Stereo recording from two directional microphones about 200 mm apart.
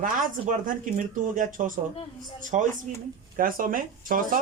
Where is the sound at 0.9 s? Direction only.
40° right (ahead or behind).